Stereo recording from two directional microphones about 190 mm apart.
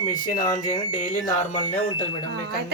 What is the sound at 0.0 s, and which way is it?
Speech, 45° left (ahead or behind).